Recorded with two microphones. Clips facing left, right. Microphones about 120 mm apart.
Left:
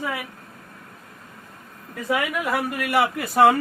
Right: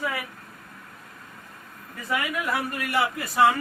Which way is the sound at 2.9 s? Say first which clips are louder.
Left 5 dB; 65° left (ahead or behind).